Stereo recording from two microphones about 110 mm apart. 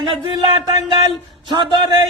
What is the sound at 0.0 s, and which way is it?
Speech, 45° right (ahead or behind).